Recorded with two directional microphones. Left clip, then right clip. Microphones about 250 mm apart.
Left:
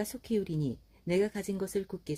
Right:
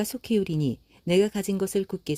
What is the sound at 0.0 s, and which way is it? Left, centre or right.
Speech, right.